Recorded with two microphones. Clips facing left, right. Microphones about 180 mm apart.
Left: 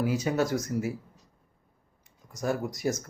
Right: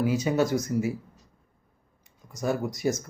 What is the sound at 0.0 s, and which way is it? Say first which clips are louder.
Speech: right 2 dB; centre (ahead or behind).